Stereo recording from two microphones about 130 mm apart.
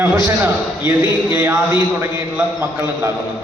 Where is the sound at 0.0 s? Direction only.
20° right (ahead or behind).